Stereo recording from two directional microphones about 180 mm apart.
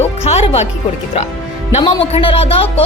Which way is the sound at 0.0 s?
35° left (ahead or behind).